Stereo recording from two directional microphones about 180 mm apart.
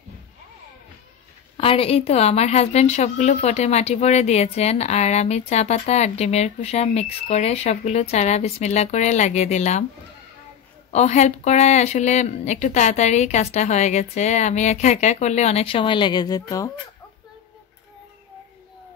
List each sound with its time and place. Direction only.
1.6 s a woman's voice: 30° left (ahead or behind)
10.9 s a woman's voice: 40° left (ahead or behind); by 16.7 s 20° left (ahead or behind)